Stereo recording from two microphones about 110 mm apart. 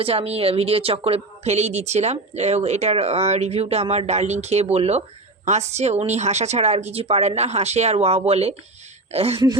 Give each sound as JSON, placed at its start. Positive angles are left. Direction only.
{"t": 0.0, "sound": "a woman's voice", "side_deg": -65}
{"t": 5.5, "sound": "a woman's voice", "side_deg": -90}